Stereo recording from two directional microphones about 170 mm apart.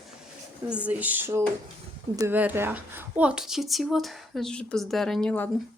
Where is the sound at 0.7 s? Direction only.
10° right (ahead or behind).